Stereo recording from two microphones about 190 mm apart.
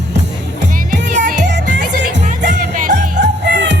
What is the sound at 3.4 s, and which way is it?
Music, 65° right (ahead or behind).